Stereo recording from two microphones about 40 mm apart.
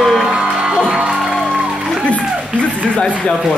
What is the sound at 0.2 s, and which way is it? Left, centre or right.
Music, centre.